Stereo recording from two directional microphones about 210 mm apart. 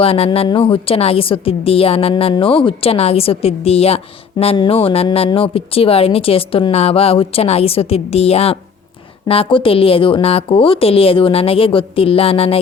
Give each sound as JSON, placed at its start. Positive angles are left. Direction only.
{"t": 0.0, "sound": "a woman's voice", "side_deg": 25}